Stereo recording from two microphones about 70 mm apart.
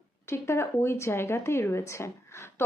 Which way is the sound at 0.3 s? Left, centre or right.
Left.